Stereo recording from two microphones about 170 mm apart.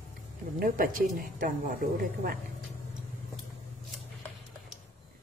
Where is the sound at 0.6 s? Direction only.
60° right (ahead or behind).